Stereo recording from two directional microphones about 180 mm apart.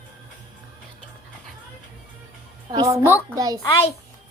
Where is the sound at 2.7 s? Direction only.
20° right (ahead or behind).